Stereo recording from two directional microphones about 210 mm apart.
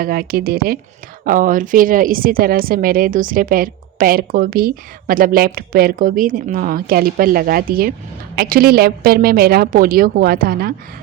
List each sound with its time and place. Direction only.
0.0 s speech: 45° right (ahead or behind)